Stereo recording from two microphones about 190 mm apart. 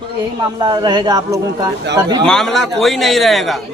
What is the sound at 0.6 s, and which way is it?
Speech, 25° right (ahead or behind).